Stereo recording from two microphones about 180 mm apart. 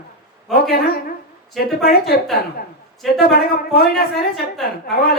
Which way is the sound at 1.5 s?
60° left (ahead or behind).